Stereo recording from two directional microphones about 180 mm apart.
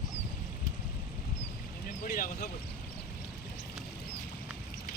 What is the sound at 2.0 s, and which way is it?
Speech, 50° left (ahead or behind).